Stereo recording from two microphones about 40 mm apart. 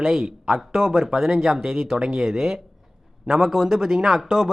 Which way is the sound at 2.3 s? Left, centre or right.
Centre.